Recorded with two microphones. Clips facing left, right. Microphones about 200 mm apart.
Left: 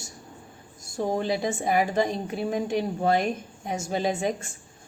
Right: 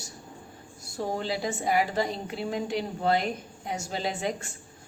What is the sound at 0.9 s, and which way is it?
Speech, 20° left (ahead or behind).